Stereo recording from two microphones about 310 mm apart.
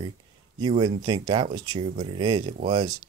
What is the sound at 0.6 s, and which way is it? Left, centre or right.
Speech, centre.